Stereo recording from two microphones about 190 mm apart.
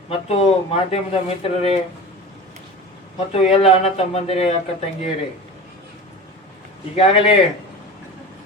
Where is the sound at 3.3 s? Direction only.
35° left (ahead or behind).